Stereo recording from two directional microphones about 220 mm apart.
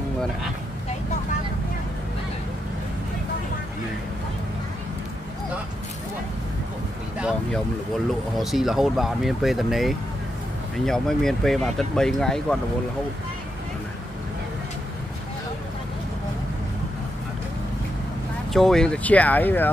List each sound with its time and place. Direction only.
7.2 s vehicle: 5° right (ahead or behind)
8.4 s speech: centre (ahead or behind)
18.5 s speech: centre (ahead or behind)